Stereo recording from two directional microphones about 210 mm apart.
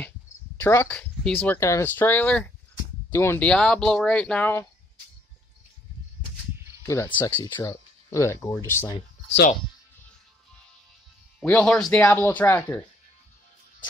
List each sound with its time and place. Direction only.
0.6 s speech: 10° left (ahead or behind)
6.9 s speech: 10° left (ahead or behind)
11.3 s speech: 5° left (ahead or behind)